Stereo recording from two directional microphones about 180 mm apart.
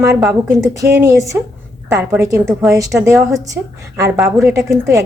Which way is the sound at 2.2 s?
15° right (ahead or behind).